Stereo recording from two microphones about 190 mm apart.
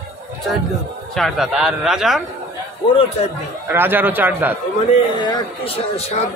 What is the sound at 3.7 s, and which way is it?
Speech, 10° right (ahead or behind).